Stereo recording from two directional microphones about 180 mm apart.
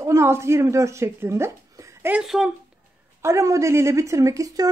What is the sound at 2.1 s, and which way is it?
Speech, 5° right (ahead or behind).